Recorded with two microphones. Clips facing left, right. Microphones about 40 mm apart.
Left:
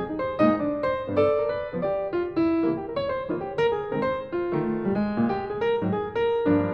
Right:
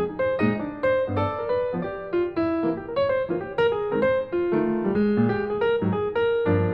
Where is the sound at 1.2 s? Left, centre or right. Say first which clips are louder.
Left 2 dB; centre.